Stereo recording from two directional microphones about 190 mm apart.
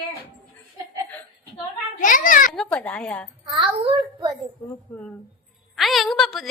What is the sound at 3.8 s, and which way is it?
Speech, 25° right (ahead or behind).